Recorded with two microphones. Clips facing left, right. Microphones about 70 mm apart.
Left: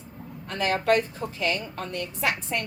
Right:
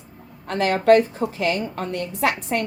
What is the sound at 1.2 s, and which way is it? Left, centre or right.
A woman's voice, right.